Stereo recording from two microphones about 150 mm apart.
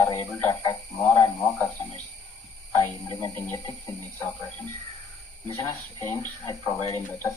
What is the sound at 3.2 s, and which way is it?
Speech, 15° left (ahead or behind).